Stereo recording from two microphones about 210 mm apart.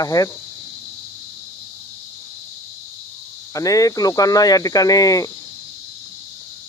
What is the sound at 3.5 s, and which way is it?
Speech, 15° left (ahead or behind).